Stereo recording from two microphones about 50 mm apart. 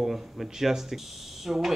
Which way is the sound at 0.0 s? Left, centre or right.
Centre.